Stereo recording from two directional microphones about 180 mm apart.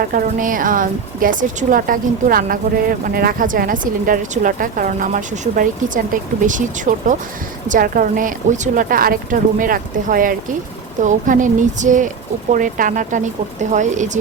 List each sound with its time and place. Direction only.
0.1 s speech: 50° right (ahead or behind)